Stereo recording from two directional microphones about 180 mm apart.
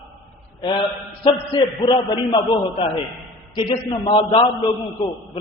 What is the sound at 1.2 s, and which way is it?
A man's voice, 30° left (ahead or behind).